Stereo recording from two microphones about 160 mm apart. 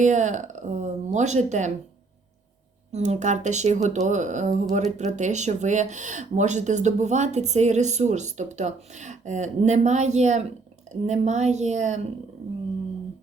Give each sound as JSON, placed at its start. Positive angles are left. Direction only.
{"t": 0.0, "sound": "speech", "side_deg": -50}
{"t": 2.9, "sound": "speech", "side_deg": -45}